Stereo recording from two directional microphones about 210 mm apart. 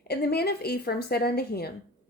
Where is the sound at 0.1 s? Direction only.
50° left (ahead or behind).